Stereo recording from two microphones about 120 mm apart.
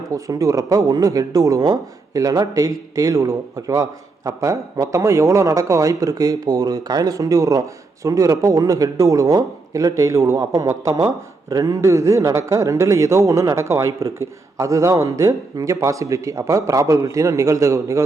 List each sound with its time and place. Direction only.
0.1 s speech: 30° right (ahead or behind)